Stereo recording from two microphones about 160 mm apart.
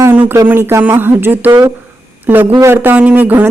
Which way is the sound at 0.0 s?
10° right (ahead or behind).